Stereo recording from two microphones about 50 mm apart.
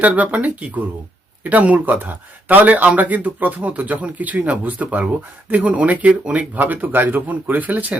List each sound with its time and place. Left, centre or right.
0.0 s speech: right